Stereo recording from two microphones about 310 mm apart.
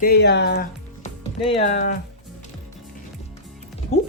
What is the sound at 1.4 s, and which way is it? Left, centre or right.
Speech, centre.